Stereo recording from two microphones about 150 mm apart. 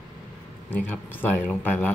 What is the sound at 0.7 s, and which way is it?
Speech, 10° left (ahead or behind).